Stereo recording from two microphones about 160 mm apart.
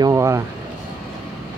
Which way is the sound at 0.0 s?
20° right (ahead or behind).